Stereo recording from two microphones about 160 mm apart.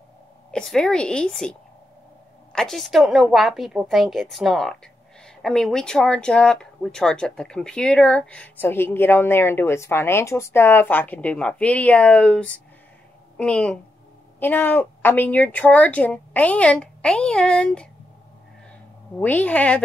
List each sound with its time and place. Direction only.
0.5 s a woman's voice: 5° left (ahead or behind)
19.1 s speech: 10° left (ahead or behind)